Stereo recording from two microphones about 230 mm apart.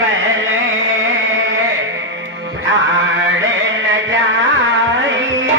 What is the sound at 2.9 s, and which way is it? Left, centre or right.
Music, right.